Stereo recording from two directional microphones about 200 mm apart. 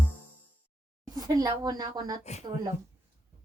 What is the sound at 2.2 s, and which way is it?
Speech, 35° left (ahead or behind).